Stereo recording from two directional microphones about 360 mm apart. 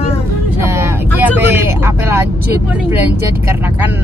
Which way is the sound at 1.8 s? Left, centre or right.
Centre.